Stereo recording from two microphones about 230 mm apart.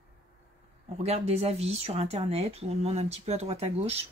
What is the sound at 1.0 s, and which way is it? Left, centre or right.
Speech, right.